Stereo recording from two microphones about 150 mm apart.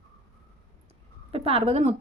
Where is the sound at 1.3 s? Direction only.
40° right (ahead or behind).